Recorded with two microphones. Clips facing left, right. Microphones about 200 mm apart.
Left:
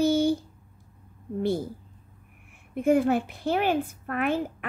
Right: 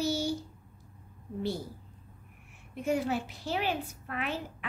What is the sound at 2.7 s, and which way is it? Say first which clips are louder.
A woman's voice: left 8 dB; 55° left (ahead or behind).